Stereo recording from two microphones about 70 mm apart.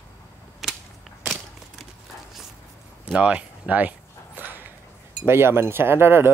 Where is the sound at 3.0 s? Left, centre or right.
Centre.